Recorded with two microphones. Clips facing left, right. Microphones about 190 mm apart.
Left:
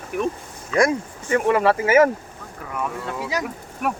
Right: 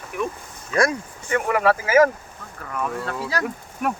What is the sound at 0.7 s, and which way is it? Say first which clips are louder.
Speech: left 2 dB; 25° left (ahead or behind).